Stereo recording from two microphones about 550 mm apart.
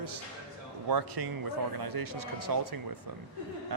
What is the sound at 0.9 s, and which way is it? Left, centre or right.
A man's voice, right.